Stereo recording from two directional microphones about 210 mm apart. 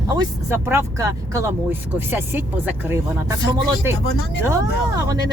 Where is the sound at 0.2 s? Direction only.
10° right (ahead or behind).